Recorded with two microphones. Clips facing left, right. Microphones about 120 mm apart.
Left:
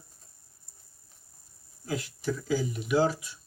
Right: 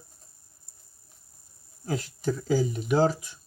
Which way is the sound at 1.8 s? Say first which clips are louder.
Right 3 dB; 40° right (ahead or behind).